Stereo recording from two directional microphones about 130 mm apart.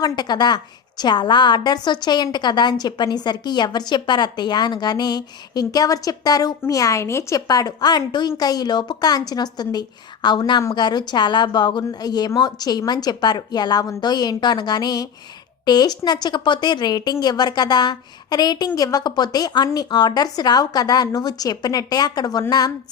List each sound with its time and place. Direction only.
0.0 s a woman's voice: 35° left (ahead or behind)